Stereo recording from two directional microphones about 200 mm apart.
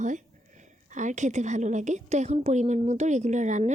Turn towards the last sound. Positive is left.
turn(degrees=-35)  # may be behind; listen again after turning